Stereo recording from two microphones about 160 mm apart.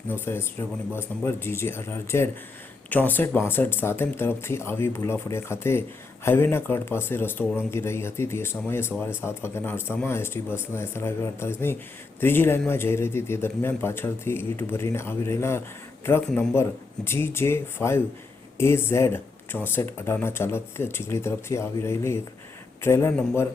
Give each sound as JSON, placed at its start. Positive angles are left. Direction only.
{"t": 0.1, "sound": "a man's voice", "side_deg": 15}